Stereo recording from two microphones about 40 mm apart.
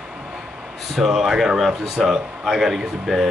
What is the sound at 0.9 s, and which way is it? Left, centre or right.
Speech, centre.